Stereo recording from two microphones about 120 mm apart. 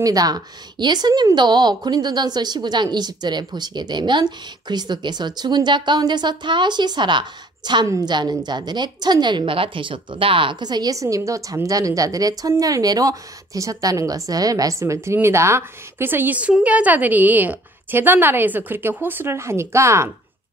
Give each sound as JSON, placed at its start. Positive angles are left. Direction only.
{"t": 0.0, "sound": "a woman's voice", "side_deg": -30}